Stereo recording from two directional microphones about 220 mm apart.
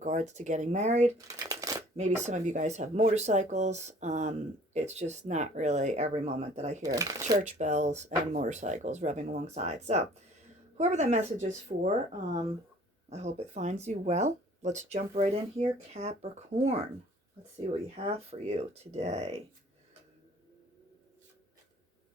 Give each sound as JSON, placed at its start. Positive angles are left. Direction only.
{"t": 0.0, "sound": "speech", "side_deg": -35}
{"t": 1.5, "sound": "shuffling cards", "side_deg": -15}
{"t": 2.0, "sound": "speech", "side_deg": -30}
{"t": 6.8, "sound": "speech", "side_deg": -15}
{"t": 7.4, "sound": "speech", "side_deg": -35}